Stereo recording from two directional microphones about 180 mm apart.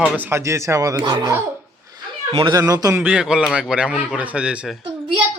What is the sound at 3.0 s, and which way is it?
A man's voice, 5° right (ahead or behind).